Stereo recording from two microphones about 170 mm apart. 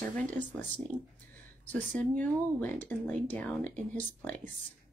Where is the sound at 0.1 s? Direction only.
10° left (ahead or behind).